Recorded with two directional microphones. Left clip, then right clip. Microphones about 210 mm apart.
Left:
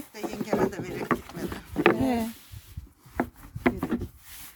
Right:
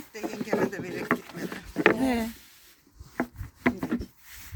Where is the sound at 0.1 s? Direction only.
55° left (ahead or behind).